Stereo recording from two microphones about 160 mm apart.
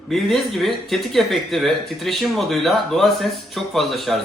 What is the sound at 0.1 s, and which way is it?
Speech, centre (ahead or behind).